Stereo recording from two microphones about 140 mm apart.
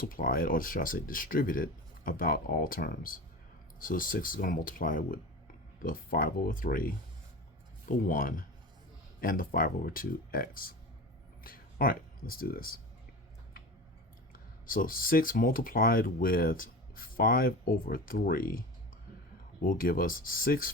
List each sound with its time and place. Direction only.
0.0 s speech: 90° left
3.8 s speech: 75° left (ahead or behind)
14.7 s speech: 90° left
19.6 s speech: 85° left